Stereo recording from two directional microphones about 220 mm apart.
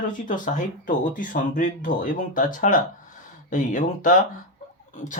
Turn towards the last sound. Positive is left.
turn(degrees=35)  # may be behind; listen again after turning